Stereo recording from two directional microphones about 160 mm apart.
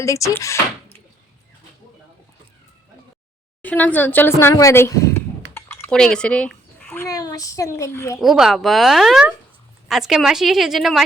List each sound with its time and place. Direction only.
0.0 s speech: 20° left (ahead or behind)
3.6 s speech: 10° left (ahead or behind)
5.5 s typing: 15° left (ahead or behind)
6.0 s a child's voice: 5° left (ahead or behind)
8.2 s a woman's voice: centre (ahead or behind)